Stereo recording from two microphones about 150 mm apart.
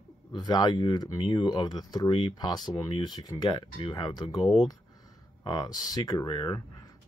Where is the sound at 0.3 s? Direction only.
30° left (ahead or behind).